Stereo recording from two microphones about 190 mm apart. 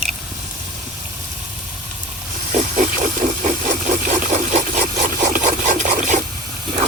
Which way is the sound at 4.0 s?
40° right (ahead or behind).